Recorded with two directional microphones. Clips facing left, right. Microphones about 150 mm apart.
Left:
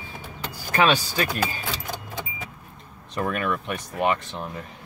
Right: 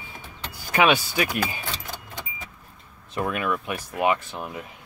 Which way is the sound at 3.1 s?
5° right (ahead or behind).